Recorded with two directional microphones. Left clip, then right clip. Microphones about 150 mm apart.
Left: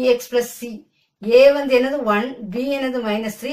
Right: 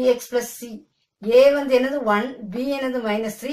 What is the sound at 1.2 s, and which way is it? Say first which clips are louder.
A woman's voice: left 2 dB; 15° left (ahead or behind).